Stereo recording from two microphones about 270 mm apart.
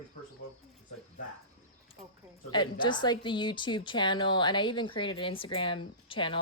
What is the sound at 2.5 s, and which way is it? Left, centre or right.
A woman's voice, centre.